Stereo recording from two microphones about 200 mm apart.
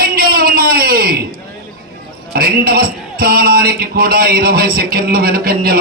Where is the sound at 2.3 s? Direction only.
50° right (ahead or behind).